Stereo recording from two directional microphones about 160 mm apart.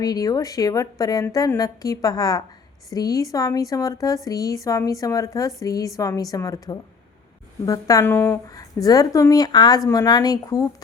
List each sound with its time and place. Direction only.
0.0 s speech: 25° left (ahead or behind)